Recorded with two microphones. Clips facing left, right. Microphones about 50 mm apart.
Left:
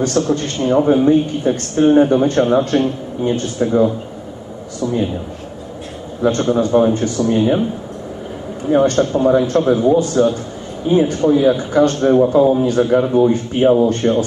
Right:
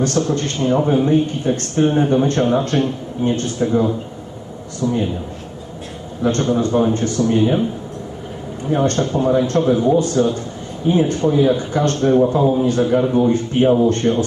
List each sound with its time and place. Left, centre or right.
0.0 s a man's voice: centre
4.8 s a man's voice: left
6.2 s a man's voice: centre
8.6 s speech: centre